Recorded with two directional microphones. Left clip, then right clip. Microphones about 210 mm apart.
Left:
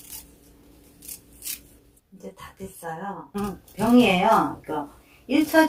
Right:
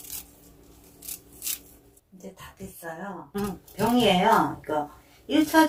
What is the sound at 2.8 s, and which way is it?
Speech, 25° left (ahead or behind).